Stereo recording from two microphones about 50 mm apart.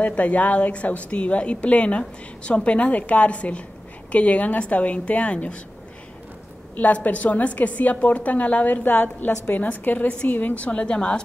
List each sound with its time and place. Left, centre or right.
0.0 s a woman's voice: left
6.7 s a woman's voice: left